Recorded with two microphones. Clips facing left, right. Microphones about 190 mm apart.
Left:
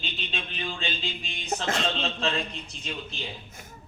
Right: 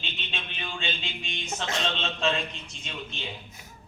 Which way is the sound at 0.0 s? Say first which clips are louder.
Left 3 dB; 35° left (ahead or behind).